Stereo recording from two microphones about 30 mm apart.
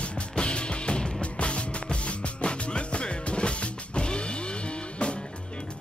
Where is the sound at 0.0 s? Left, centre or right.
Left.